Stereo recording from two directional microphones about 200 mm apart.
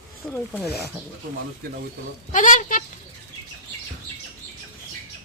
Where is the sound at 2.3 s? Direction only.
40° left (ahead or behind).